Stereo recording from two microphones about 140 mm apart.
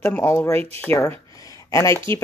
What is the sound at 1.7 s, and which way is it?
Speech, 20° left (ahead or behind).